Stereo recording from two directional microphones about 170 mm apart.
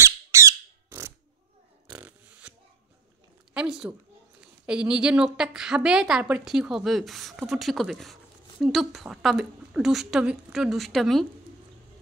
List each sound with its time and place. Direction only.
0.0 s squawk: 15° right (ahead or behind)
2.0 s burping: 5° right (ahead or behind)
3.5 s a woman's voice: 5° right (ahead or behind)